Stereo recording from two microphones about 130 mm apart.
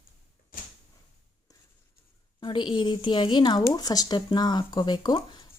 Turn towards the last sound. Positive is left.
turn(degrees=35)  # may be behind; listen again after turning